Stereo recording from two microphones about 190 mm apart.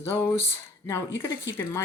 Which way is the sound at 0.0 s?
10° left (ahead or behind).